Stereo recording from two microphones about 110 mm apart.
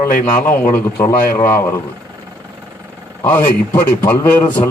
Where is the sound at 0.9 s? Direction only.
30° left (ahead or behind).